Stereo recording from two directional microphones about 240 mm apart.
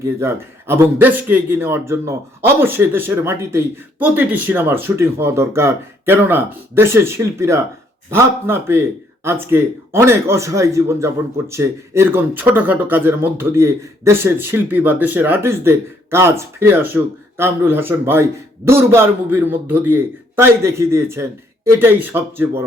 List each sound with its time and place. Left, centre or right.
0.0 s speech: centre